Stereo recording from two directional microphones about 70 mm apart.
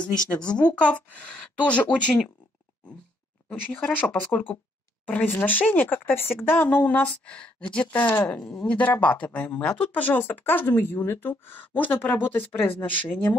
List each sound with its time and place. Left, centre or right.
0.6 s speech: centre
3.4 s speech: centre